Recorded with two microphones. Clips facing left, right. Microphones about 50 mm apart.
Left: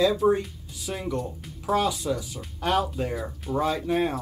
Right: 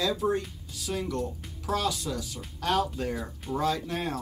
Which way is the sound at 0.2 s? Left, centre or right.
Centre.